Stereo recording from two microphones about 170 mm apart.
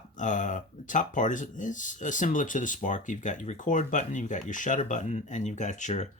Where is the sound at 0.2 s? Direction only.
45° left (ahead or behind).